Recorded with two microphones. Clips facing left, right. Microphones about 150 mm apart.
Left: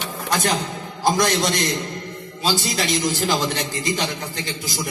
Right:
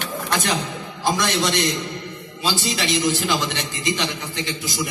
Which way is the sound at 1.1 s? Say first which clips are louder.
Left 1 dB; 45° left (ahead or behind).